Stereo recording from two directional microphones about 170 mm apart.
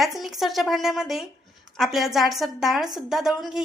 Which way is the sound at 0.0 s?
Centre (ahead or behind).